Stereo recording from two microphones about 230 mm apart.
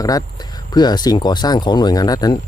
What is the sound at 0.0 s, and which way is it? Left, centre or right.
Speech, centre.